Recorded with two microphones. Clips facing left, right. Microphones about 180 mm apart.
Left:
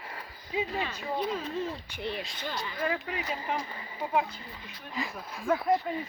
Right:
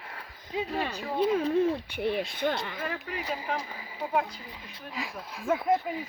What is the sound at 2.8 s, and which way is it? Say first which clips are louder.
Speech: left 4 dB; centre (ahead or behind).